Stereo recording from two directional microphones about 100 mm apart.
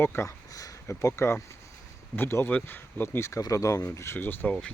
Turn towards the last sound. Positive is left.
turn(degrees=20)  # may be behind; listen again after turning